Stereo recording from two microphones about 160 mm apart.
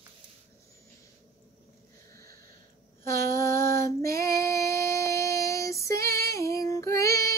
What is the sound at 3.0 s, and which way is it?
Female singing, 15° left (ahead or behind).